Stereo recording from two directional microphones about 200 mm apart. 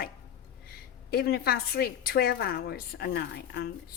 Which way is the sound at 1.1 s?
50° left (ahead or behind).